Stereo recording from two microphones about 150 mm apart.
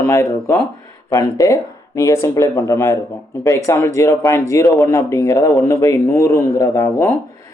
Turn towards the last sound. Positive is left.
turn(degrees=20)  # may be behind; listen again after turning